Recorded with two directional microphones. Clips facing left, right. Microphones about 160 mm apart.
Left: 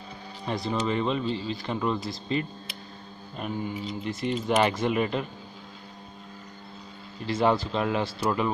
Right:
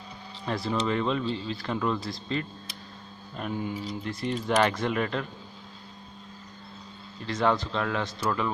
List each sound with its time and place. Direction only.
0.5 s speech: centre (ahead or behind)
3.3 s speech: 5° left (ahead or behind)
7.2 s a man's voice: 5° left (ahead or behind)